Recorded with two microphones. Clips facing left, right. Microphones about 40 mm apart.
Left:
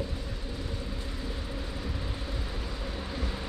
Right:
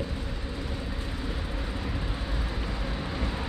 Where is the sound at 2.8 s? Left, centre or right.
Right.